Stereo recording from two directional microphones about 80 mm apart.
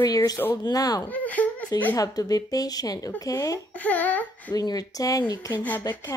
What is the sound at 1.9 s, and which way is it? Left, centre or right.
A woman's voice, left.